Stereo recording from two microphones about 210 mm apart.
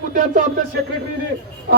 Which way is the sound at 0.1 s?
35° right (ahead or behind).